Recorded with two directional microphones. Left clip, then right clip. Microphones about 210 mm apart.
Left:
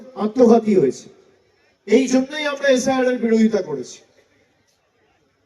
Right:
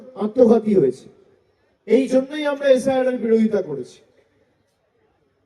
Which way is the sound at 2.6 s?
60° right (ahead or behind).